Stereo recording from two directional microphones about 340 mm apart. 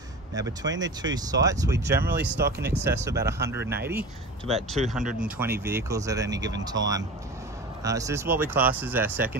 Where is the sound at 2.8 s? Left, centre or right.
Centre.